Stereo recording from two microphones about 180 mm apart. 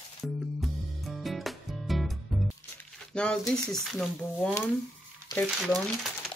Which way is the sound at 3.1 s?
5° left (ahead or behind).